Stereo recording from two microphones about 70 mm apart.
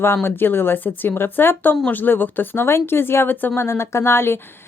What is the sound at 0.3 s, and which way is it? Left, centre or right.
A woman's voice, left.